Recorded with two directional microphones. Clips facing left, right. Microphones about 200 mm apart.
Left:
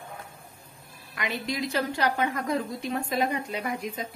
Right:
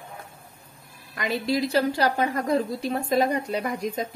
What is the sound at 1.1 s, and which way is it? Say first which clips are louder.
A woman's voice: right 6 dB; 40° right (ahead or behind).